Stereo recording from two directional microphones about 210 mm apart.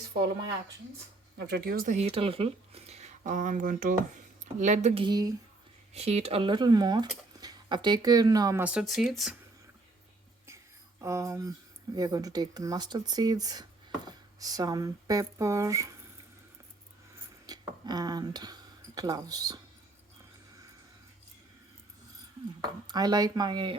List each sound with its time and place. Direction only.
1.5 s speech: 50° right (ahead or behind); by 5.3 s 20° right (ahead or behind)
5.9 s speech: 30° right (ahead or behind); by 9.3 s centre (ahead or behind)
11.0 s speech: 15° right (ahead or behind)
17.4 s speech: 20° right (ahead or behind)
22.9 s speech: 20° right (ahead or behind)